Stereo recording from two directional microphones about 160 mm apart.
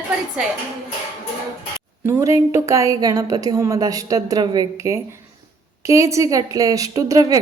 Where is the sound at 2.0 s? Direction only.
20° right (ahead or behind).